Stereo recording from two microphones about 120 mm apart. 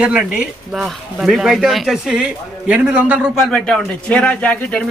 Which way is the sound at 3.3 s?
5° left (ahead or behind).